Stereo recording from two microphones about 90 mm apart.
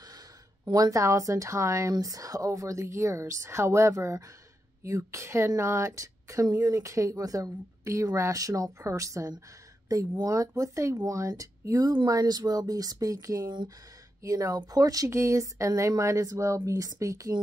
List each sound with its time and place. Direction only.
0.7 s speech: 45° right (ahead or behind)